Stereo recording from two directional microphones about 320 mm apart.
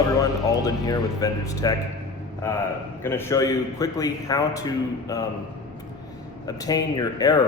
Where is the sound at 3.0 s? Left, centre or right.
Centre.